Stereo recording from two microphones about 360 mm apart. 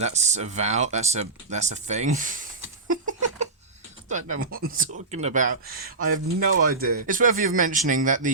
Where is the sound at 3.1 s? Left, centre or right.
Centre.